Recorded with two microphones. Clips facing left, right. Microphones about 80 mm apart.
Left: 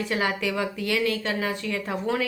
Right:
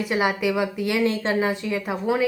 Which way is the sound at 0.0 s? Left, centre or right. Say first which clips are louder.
Right 4 dB; centre.